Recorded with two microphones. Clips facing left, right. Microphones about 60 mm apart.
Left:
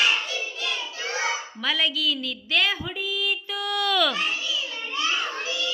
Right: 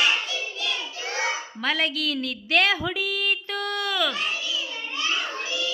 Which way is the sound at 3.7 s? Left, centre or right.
Right.